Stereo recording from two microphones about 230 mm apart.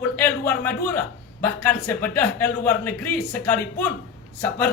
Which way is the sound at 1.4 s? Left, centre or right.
Centre.